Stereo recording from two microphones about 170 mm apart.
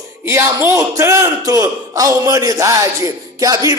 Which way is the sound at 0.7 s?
15° right (ahead or behind).